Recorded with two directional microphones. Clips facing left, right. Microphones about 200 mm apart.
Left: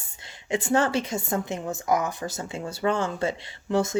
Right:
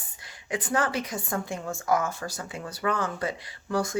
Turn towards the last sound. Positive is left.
turn(degrees=25)  # may be behind; listen again after turning